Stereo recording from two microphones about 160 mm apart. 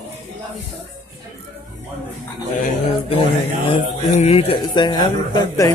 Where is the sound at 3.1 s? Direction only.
35° left (ahead or behind).